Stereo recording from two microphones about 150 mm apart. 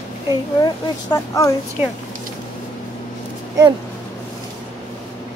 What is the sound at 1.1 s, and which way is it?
Speech, 25° left (ahead or behind).